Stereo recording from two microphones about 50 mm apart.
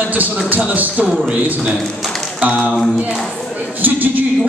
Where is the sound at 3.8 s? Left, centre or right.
Right.